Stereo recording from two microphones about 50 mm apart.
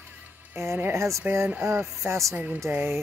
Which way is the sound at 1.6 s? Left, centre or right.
Right.